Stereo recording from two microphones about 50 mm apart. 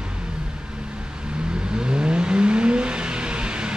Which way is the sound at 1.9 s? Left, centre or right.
Centre.